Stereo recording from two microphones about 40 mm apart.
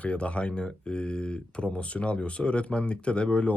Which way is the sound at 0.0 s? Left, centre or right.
Left.